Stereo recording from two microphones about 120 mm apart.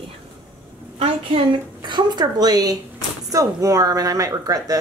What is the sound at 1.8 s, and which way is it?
A woman's voice, 40° right (ahead or behind).